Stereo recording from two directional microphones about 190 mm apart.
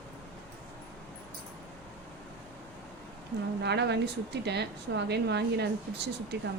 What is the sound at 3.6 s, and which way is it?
Speech, 65° right (ahead or behind).